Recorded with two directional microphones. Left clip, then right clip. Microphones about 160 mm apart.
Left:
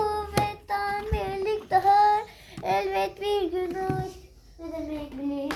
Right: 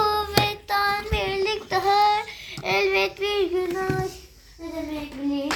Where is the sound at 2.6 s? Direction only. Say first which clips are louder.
Right 4 dB; 70° left (ahead or behind).